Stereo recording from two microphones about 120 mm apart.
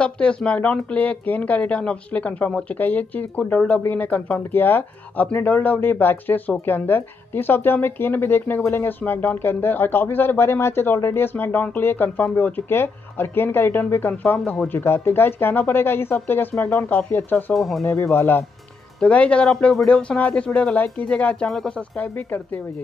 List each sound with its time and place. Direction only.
0.0 s a woman's voice: 10° left (ahead or behind)
17.6 s speech: centre (ahead or behind)
17.8 s a woman's voice: 20° left (ahead or behind)